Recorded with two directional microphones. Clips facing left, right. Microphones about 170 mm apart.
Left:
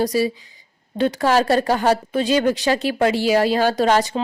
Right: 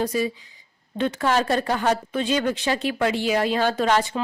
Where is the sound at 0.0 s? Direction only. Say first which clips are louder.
Left 4 dB; 35° left (ahead or behind).